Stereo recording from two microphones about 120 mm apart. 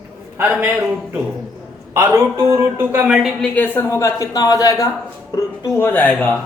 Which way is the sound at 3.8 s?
25° left (ahead or behind).